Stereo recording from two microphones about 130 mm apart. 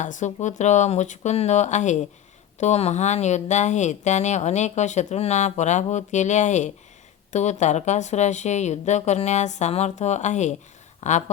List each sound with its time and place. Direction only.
0.0 s speech: 70° left (ahead or behind)